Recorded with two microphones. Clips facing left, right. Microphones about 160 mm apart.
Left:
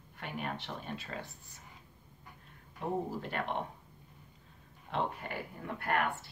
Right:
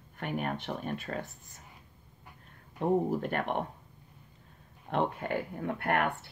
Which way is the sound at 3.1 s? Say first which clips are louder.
Right 6 dB; 55° right (ahead or behind).